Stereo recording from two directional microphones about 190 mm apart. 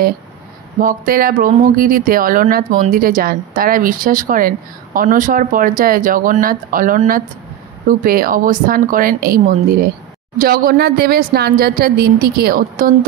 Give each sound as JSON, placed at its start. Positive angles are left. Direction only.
{"t": 0.7, "sound": "speech", "side_deg": -45}